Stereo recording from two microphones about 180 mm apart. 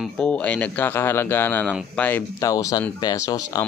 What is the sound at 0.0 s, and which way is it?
Speech, 5° left (ahead or behind).